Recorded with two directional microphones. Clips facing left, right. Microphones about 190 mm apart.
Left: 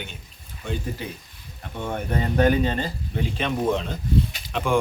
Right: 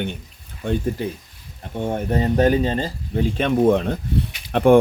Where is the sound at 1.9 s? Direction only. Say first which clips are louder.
Right 5 dB; 35° right (ahead or behind).